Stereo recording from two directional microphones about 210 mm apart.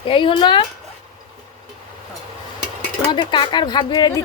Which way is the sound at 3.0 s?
20° left (ahead or behind).